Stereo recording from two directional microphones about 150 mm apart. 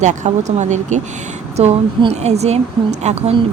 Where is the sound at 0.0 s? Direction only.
55° right (ahead or behind).